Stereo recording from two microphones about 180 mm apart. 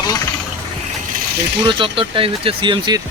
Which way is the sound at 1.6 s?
30° right (ahead or behind).